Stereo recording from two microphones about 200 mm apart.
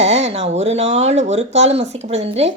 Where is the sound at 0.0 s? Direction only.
35° right (ahead or behind).